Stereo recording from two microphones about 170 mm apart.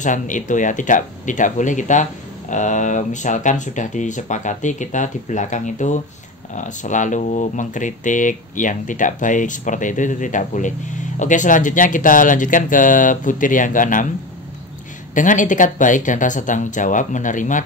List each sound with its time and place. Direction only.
0.0 s speech: 50° left (ahead or behind)
15.1 s speech: 50° left (ahead or behind)